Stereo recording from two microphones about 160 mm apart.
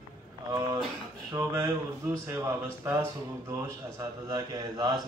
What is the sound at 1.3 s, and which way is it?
Speech, 20° right (ahead or behind).